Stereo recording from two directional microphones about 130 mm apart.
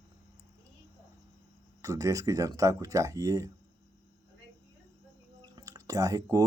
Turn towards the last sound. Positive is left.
turn(degrees=-25)  # may be behind; listen again after turning